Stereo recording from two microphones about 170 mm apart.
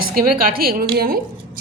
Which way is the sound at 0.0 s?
60° right (ahead or behind).